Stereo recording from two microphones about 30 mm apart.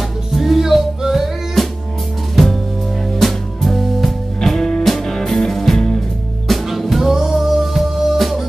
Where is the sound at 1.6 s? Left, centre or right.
Centre.